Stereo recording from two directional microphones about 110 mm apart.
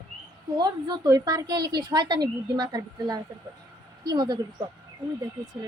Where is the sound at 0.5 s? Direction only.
40° right (ahead or behind).